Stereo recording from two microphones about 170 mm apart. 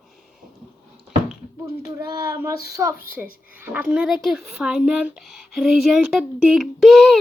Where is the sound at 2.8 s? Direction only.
15° right (ahead or behind).